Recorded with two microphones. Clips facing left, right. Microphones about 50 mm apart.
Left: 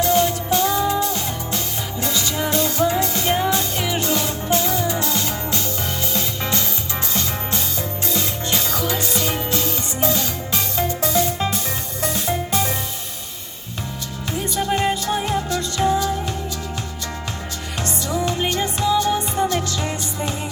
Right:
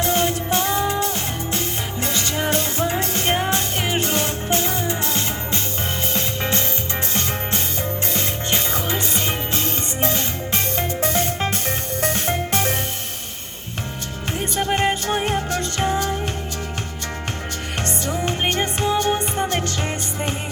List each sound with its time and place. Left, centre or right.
0.0 s music: right
14.5 s music: right
17.8 s music: right